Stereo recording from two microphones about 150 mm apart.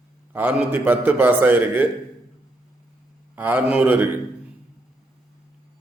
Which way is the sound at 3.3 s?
10° right (ahead or behind).